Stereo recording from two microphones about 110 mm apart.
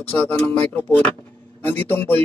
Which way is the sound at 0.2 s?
15° left (ahead or behind).